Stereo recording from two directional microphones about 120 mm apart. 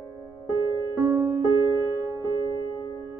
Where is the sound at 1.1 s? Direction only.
25° right (ahead or behind).